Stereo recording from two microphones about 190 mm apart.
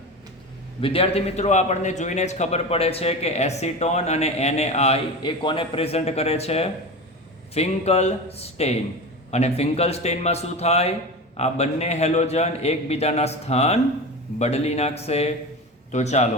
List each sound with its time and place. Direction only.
0.8 s a man's voice: 30° left (ahead or behind)